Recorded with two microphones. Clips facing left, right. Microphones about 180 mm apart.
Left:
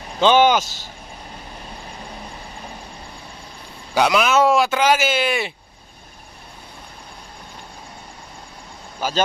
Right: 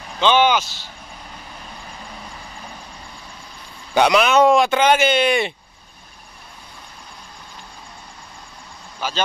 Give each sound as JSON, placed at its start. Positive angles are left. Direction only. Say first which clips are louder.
{"t": 0.2, "sound": "speech", "louder": "left 2 dB", "side_deg": 45}
{"t": 3.9, "sound": "speech", "louder": "right 2 dB", "side_deg": 0}
{"t": 9.0, "sound": "speech", "louder": "left 2 dB", "side_deg": 45}